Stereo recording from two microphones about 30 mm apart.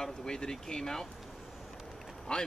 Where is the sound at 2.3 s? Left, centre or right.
Left.